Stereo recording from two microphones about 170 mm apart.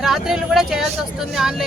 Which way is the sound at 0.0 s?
Centre (ahead or behind).